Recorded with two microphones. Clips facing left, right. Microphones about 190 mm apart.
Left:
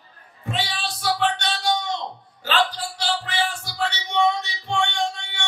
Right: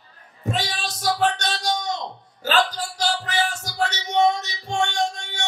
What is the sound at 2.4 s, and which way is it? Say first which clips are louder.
Music: right 1 dB; 40° right (ahead or behind).